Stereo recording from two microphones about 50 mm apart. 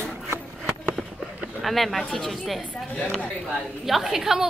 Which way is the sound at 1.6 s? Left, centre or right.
Centre.